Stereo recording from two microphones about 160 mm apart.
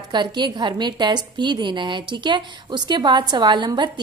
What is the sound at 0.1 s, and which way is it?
A woman's voice, 30° right (ahead or behind).